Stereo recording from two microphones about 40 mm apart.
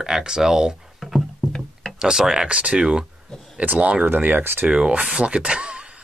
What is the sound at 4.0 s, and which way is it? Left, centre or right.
Speech, right.